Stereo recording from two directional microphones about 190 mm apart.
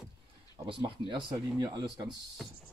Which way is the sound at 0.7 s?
25° right (ahead or behind).